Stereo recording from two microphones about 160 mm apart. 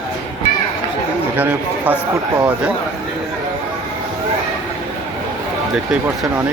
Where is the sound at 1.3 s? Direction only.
10° right (ahead or behind).